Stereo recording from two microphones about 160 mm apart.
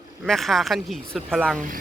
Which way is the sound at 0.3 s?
Centre (ahead or behind).